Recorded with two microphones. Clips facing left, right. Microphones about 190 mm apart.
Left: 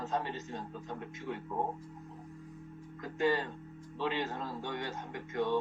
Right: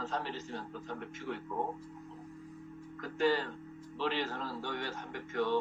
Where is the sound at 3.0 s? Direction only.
15° left (ahead or behind).